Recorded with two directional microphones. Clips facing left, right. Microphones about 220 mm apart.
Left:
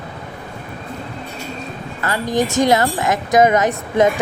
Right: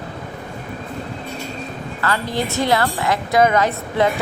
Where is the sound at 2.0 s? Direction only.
15° left (ahead or behind).